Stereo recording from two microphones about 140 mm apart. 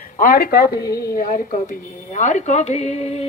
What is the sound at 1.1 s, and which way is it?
A woman's voice, 75° left (ahead or behind).